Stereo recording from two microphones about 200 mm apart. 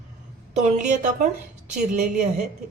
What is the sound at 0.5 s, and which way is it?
A man's voice, 35° right (ahead or behind).